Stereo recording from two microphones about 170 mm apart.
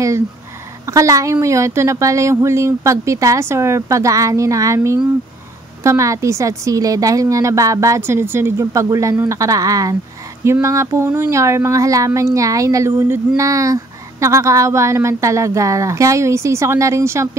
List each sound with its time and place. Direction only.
0.8 s a woman's voice: 20° right (ahead or behind)